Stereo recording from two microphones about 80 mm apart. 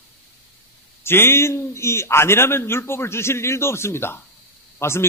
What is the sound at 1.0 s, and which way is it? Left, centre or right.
A man's voice, left.